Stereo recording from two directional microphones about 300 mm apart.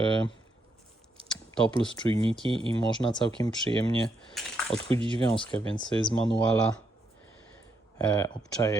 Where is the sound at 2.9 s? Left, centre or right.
Centre.